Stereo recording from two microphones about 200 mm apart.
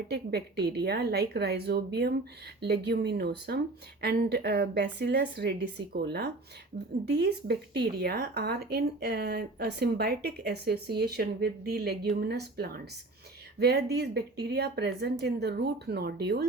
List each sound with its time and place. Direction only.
0.1 s speech: 55° right (ahead or behind)